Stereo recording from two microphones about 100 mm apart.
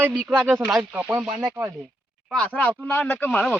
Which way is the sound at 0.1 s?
10° right (ahead or behind).